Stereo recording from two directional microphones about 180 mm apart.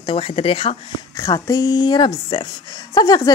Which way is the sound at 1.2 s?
20° left (ahead or behind).